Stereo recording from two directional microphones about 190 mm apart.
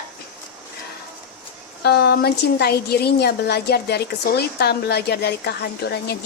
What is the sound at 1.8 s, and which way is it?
Speech, 55° left (ahead or behind).